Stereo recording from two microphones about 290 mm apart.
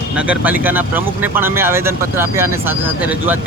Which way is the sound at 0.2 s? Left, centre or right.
Centre.